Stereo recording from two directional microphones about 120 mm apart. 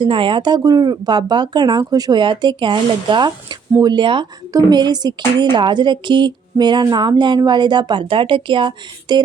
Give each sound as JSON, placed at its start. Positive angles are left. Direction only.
{"t": 0.0, "sound": "speech", "side_deg": -45}